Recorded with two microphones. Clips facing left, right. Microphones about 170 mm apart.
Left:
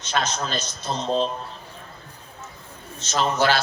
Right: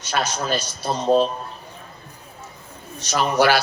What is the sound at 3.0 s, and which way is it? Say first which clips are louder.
Speech: right 3 dB; 10° right (ahead or behind).